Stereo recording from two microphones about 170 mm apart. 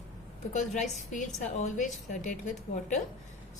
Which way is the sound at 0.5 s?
45° left (ahead or behind).